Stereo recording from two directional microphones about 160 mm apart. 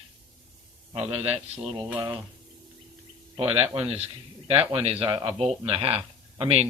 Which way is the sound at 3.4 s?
40° right (ahead or behind).